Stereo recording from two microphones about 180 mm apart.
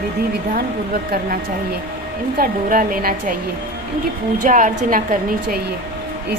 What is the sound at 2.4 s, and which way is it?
Speech, 50° right (ahead or behind).